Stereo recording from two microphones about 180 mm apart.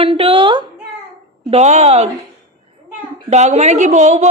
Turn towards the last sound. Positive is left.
turn(degrees=-40)  # may be behind; listen again after turning